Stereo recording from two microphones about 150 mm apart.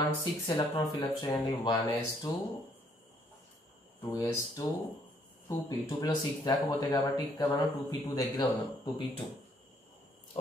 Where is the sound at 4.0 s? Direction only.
20° left (ahead or behind).